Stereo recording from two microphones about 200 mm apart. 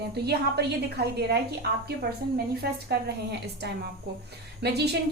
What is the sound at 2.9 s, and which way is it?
A woman's voice, 55° right (ahead or behind).